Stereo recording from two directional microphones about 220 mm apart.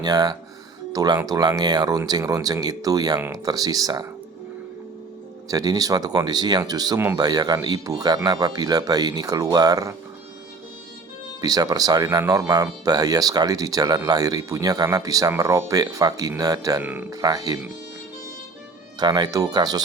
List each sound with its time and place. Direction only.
0.0 s speech: 15° right (ahead or behind)
5.5 s speech: 15° right (ahead or behind)
11.3 s speech: 15° right (ahead or behind)
18.9 s speech: 20° right (ahead or behind)